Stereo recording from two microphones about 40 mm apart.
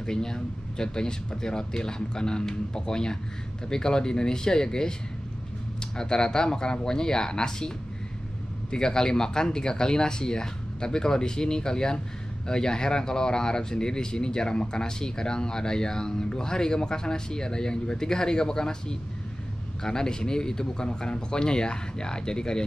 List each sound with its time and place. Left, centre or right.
0.0 s speech: centre
5.9 s a man's voice: centre